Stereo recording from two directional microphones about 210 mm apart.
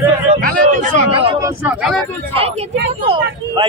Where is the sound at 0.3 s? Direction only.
35° right (ahead or behind).